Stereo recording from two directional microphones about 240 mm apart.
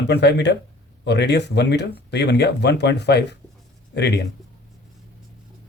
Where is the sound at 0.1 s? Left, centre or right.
Left.